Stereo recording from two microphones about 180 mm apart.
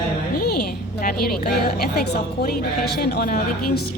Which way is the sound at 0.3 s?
60° left (ahead or behind).